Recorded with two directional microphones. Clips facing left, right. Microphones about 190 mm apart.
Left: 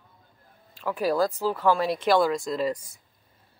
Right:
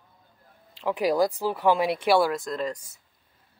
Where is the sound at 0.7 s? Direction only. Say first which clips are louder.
Right 1 dB; 20° right (ahead or behind); by 2.9 s 5° left (ahead or behind).